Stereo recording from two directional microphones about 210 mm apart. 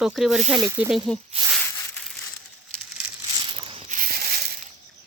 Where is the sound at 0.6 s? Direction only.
15° right (ahead or behind).